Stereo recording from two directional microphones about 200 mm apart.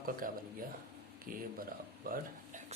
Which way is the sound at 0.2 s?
45° right (ahead or behind).